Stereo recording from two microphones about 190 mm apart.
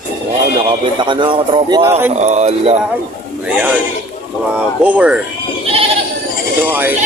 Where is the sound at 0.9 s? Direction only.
25° right (ahead or behind).